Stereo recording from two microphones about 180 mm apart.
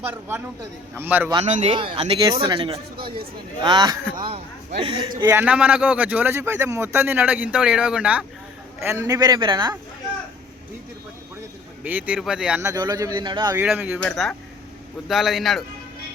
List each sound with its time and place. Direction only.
0.1 s speech: 10° right (ahead or behind)
1.5 s speech: 30° right (ahead or behind)
5.3 s speech: 10° right (ahead or behind); by 9.7 s 25° right (ahead or behind)
11.8 s speech: 10° right (ahead or behind)
12.6 s speech: 20° right (ahead or behind)
13.7 s a man's voice: 10° right (ahead or behind)